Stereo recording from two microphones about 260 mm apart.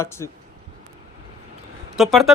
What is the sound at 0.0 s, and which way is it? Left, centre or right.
Speech, centre.